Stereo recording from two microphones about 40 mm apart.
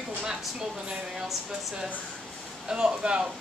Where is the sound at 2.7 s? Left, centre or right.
Centre.